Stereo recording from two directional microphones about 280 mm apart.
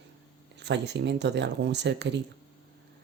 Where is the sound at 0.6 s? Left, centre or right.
Right.